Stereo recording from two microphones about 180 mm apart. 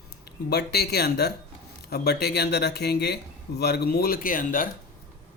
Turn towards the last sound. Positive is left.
turn(degrees=50)  # may be behind; listen again after turning